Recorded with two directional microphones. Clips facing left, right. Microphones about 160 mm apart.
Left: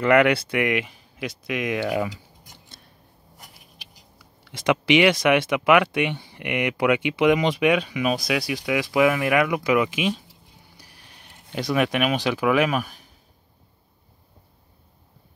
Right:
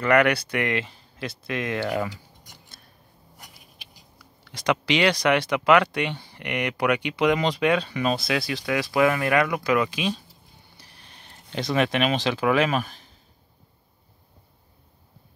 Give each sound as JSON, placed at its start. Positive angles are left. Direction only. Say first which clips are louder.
{"t": 0.0, "sound": "speech", "louder": "left 2 dB", "side_deg": 25}
{"t": 4.5, "sound": "speech", "louder": "left 4 dB", "side_deg": 20}